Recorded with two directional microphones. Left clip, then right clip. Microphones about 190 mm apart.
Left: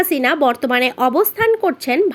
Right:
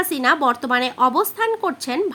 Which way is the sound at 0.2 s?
10° left (ahead or behind).